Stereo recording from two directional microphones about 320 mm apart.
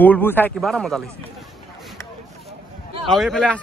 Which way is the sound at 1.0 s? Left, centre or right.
Centre.